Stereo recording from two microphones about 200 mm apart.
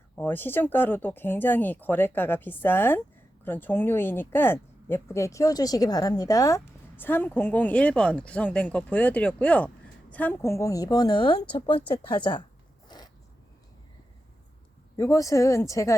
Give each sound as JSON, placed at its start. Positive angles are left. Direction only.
{"t": 0.2, "sound": "speech", "side_deg": 10}
{"t": 12.9, "sound": "zipper", "side_deg": 20}
{"t": 14.9, "sound": "speech", "side_deg": 15}